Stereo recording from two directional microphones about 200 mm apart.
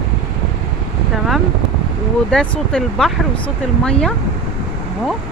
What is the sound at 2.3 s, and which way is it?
Speech, 5° left (ahead or behind).